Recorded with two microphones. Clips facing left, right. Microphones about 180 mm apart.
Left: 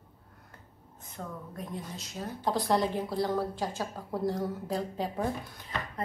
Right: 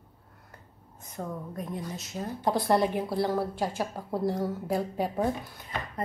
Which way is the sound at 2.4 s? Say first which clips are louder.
Right 3 dB; 10° right (ahead or behind).